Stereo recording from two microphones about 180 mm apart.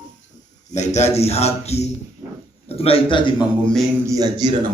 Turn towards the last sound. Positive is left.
turn(degrees=-20)  # may be behind; listen again after turning